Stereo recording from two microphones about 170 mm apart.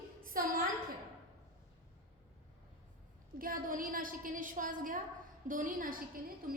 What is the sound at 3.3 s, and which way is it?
A woman's voice, 55° right (ahead or behind).